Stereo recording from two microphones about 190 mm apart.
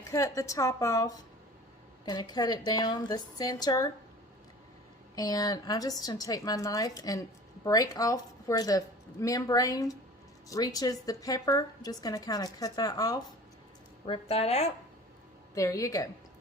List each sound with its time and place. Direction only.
0.1 s a woman's voice: 15° left (ahead or behind)
5.1 s a woman's voice: 20° left (ahead or behind)
14.1 s a woman's voice: 30° left (ahead or behind)
15.5 s a woman's voice: 15° left (ahead or behind)